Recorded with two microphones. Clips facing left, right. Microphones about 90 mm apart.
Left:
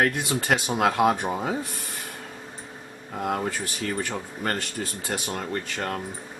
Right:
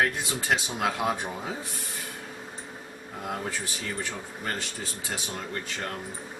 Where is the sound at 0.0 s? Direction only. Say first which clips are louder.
Left 3 dB; 60° left (ahead or behind).